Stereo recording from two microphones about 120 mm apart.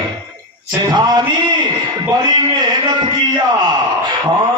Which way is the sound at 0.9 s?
35° right (ahead or behind).